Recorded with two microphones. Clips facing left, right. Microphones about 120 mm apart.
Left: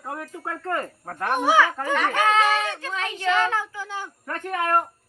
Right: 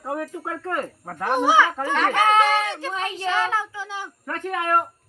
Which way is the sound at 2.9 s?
35° right (ahead or behind).